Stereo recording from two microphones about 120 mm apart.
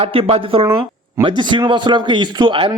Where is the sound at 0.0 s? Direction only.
50° right (ahead or behind).